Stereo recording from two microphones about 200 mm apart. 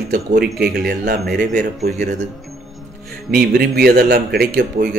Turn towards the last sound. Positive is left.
turn(degrees=-50)  # may be behind; listen again after turning